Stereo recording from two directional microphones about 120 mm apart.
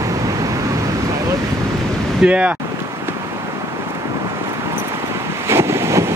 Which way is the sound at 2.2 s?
10° right (ahead or behind).